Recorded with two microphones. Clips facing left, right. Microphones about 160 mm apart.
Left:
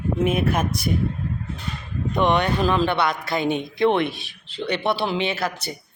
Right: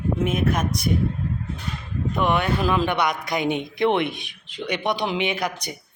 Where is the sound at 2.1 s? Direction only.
5° right (ahead or behind).